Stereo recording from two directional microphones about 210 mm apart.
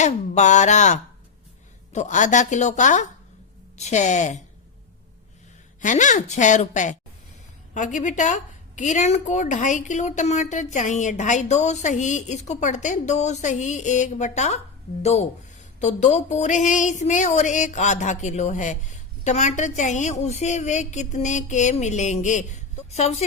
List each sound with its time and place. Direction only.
0.0 s a woman's voice: 35° left (ahead or behind)
5.8 s a woman's voice: 35° left (ahead or behind)